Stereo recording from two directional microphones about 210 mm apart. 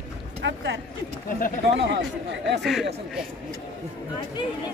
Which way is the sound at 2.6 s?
Centre (ahead or behind).